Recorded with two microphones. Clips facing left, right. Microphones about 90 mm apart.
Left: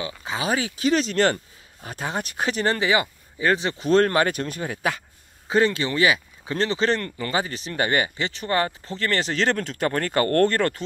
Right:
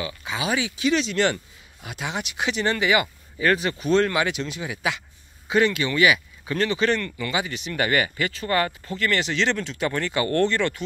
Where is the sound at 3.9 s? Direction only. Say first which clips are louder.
Left 3 dB; 45° left (ahead or behind).